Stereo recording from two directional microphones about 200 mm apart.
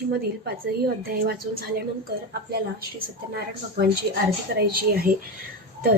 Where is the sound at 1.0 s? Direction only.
50° right (ahead or behind).